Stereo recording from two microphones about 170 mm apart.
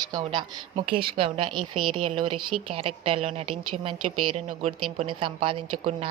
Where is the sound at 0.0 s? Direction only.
25° right (ahead or behind).